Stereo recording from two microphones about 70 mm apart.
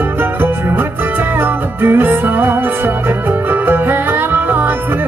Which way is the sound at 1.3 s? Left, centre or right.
Right.